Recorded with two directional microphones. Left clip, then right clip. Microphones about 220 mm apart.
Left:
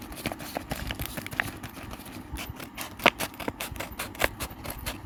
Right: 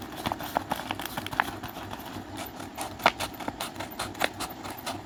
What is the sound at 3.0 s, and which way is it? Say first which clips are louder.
Scissors: left 2 dB; 30° left (ahead or behind).